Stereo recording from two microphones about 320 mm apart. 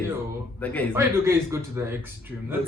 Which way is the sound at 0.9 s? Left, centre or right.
Centre.